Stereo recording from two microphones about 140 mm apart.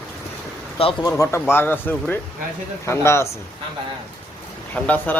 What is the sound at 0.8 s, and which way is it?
Speech, 45° left (ahead or behind).